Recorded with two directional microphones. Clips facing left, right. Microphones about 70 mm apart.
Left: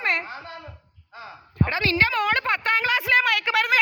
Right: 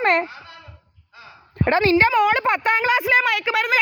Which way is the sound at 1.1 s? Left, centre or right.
Left.